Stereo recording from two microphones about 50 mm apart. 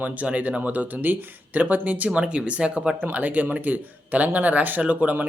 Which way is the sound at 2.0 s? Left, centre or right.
Centre.